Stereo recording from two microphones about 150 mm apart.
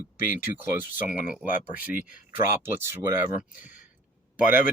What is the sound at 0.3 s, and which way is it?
Speech, 15° right (ahead or behind).